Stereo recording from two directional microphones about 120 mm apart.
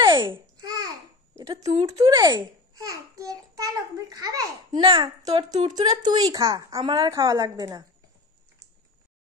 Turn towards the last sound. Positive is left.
turn(degrees=-30)  # may be behind; listen again after turning